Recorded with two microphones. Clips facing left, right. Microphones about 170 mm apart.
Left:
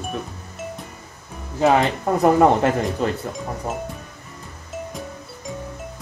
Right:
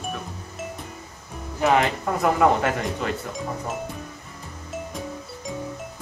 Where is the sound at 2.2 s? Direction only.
35° left (ahead or behind).